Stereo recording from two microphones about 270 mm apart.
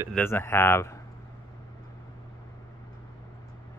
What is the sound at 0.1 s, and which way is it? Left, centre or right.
Speech, centre.